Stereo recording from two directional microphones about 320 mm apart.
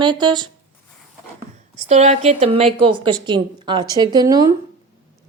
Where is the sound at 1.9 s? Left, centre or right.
Right.